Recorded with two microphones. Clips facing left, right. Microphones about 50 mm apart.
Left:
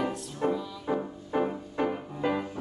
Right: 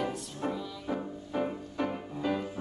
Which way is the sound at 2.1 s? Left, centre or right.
Left.